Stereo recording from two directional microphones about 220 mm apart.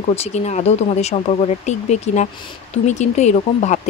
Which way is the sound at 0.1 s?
30° left (ahead or behind).